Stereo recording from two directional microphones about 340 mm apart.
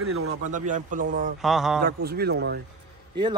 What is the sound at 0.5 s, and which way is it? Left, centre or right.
Speech, right.